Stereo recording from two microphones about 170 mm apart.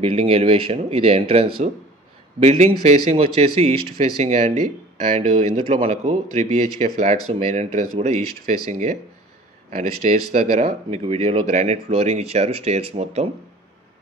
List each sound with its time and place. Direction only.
0.0 s speech: 35° right (ahead or behind)